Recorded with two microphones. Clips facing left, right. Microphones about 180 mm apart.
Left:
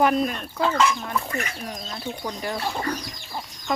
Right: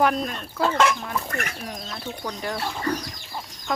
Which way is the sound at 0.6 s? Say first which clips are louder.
Right 1 dB; 60° right (ahead or behind).